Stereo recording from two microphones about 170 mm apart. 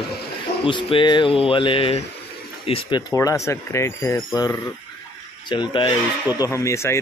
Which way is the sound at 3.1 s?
20° left (ahead or behind).